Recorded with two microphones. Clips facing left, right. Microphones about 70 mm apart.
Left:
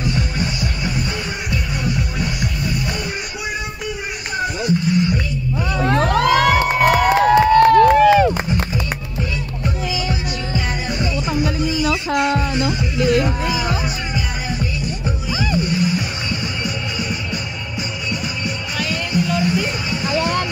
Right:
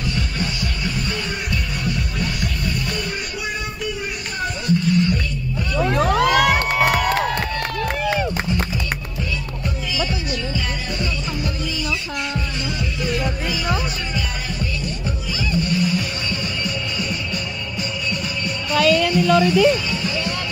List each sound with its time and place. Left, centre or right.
0.0 s music: centre
4.6 s music: centre
5.9 s music: centre
6.7 s crowd: centre
7.5 s crowd: left
10.0 s music: centre
11.9 s a sound: left
12.5 s music: centre